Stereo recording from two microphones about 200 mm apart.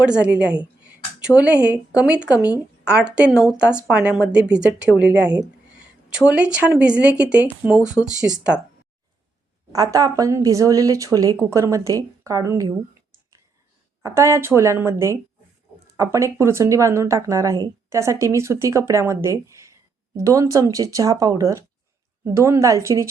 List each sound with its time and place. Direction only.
0.0 s speech: 5° right (ahead or behind)
8.5 s speech: 10° left (ahead or behind)
9.7 s speech: 15° right (ahead or behind)